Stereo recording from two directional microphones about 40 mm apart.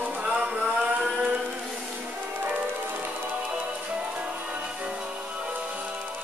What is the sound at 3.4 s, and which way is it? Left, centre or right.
Music, right.